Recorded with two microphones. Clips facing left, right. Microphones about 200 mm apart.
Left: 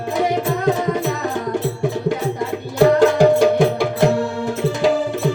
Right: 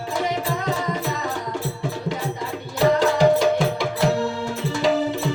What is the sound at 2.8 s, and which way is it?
Music, 50° left (ahead or behind).